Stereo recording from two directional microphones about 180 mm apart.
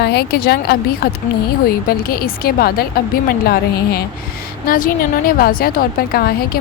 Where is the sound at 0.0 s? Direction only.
65° left (ahead or behind).